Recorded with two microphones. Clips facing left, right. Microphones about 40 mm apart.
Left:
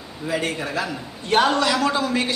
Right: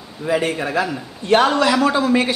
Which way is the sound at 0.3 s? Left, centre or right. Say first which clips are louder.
Right 5 dB; centre.